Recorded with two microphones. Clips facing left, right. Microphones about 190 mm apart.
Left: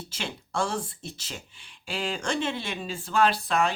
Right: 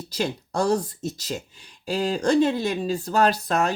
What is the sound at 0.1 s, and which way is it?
Speech, 40° right (ahead or behind).